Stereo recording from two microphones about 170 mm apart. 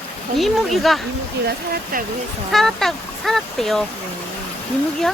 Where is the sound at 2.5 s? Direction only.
Centre (ahead or behind).